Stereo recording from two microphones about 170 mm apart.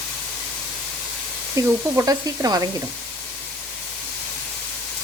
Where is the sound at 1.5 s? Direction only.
20° right (ahead or behind).